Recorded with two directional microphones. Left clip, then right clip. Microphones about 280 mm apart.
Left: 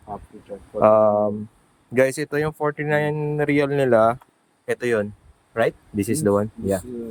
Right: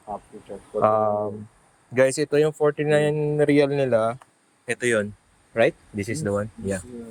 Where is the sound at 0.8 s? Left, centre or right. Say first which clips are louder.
Left 5 dB; left.